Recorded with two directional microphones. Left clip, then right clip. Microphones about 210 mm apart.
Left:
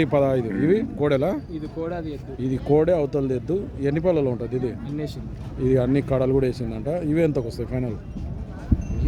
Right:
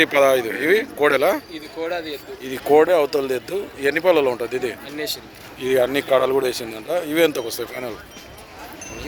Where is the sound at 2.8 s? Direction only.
Centre (ahead or behind).